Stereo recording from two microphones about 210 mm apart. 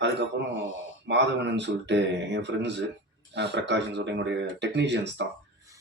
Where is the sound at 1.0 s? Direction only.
55° right (ahead or behind).